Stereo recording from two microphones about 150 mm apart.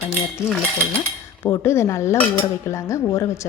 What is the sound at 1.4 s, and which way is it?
Dishes, 20° left (ahead or behind).